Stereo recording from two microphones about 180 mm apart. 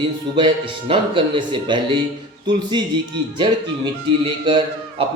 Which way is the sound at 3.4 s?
25° right (ahead or behind).